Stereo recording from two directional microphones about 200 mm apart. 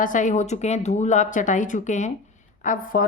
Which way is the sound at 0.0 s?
40° left (ahead or behind).